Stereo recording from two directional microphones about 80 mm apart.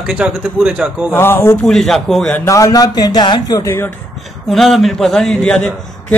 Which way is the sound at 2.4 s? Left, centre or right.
Left.